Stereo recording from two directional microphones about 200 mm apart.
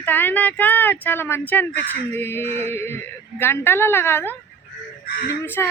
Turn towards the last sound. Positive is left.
turn(degrees=10)  # may be behind; listen again after turning